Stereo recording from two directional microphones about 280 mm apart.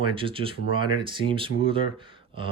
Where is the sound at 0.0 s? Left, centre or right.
Centre.